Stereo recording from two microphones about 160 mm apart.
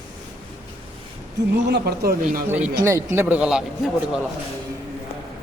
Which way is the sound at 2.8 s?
15° right (ahead or behind).